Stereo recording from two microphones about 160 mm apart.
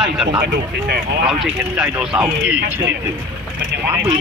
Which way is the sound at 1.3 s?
5° right (ahead or behind).